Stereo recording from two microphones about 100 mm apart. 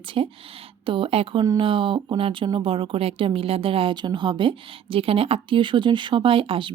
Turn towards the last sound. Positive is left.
turn(degrees=-60)  # may be behind; listen again after turning